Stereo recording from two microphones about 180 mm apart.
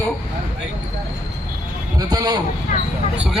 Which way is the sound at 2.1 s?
20° right (ahead or behind).